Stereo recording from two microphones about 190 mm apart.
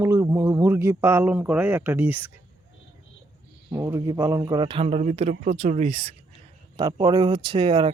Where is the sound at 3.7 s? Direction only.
15° right (ahead or behind); by 6.1 s 30° right (ahead or behind).